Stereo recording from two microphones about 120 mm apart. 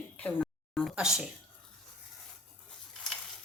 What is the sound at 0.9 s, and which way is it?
Speech, 5° right (ahead or behind).